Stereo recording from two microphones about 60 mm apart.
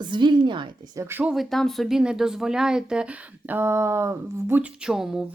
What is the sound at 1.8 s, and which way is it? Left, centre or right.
Speech, centre.